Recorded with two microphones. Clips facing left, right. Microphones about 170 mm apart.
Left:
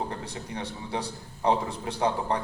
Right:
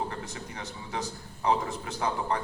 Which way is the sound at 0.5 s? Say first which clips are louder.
Left 5 dB; 30° left (ahead or behind).